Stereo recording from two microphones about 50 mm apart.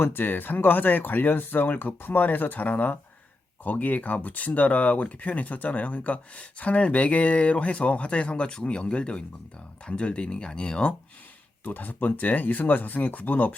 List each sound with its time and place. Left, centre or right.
0.0 s speech: left
11.6 s speech: left